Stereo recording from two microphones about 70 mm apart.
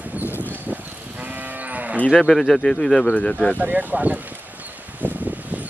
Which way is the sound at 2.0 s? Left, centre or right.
Centre.